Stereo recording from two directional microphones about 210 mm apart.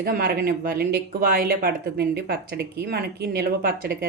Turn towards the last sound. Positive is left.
turn(degrees=-45)  # may be behind; listen again after turning